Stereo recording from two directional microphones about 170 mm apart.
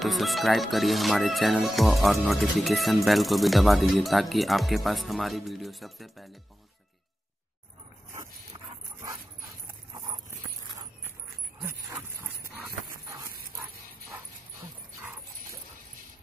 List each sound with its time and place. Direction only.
0.0 s speech: centre (ahead or behind)
9.9 s horse: 25° right (ahead or behind)
11.6 s dog: 15° right (ahead or behind)
13.6 s dog: 15° right (ahead or behind)